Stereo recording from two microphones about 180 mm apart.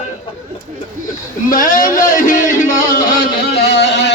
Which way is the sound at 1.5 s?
50° left (ahead or behind).